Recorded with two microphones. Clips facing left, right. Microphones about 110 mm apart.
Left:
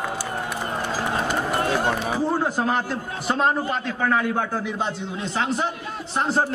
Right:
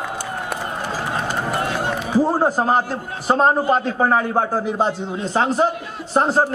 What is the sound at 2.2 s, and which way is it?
A man's voice, 40° right (ahead or behind).